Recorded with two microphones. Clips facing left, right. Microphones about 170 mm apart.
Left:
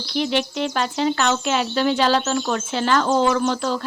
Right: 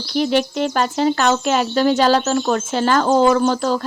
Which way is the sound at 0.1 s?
45° right (ahead or behind).